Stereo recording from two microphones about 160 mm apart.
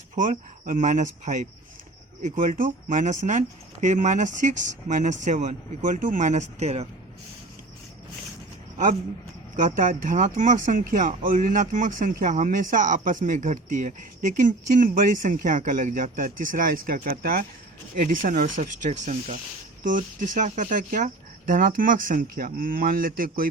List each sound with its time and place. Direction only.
0.2 s speech: 55° right (ahead or behind)
9.6 s speech: 50° right (ahead or behind)